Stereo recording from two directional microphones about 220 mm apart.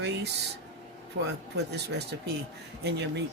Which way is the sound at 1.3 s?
50° right (ahead or behind).